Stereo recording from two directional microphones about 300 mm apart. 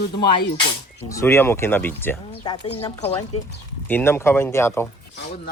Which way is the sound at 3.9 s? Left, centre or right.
Centre.